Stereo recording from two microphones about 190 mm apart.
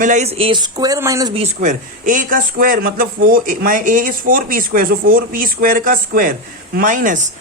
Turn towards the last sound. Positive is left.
turn(degrees=-45)  # may be behind; listen again after turning